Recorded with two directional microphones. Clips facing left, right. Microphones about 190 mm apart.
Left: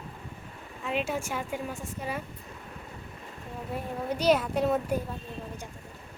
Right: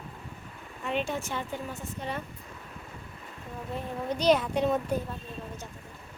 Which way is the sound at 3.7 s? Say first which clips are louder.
Even; 10° left (ahead or behind).